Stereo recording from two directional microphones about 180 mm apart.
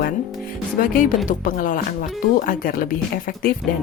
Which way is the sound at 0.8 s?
55° left (ahead or behind).